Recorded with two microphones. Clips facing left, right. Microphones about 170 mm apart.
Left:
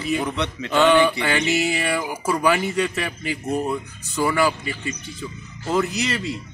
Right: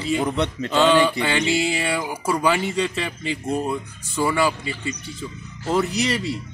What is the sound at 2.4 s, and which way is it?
Speech, 25° right (ahead or behind).